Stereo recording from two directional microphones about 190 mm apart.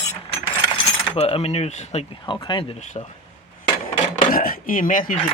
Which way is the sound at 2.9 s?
30° left (ahead or behind).